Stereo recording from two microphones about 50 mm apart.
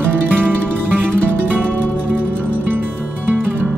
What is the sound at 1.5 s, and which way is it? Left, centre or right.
Music, right.